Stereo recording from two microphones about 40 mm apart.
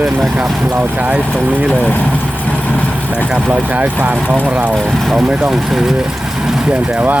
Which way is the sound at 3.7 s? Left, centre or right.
Right.